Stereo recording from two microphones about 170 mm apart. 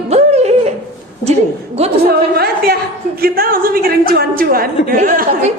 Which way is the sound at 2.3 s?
65° right (ahead or behind).